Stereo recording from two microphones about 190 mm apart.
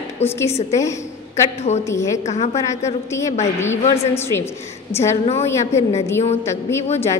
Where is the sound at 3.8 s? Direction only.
35° left (ahead or behind).